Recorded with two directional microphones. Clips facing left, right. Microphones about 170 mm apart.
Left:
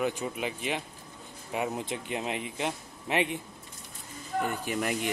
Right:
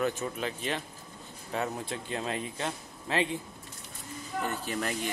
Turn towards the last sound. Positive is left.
turn(degrees=15)  # may be behind; listen again after turning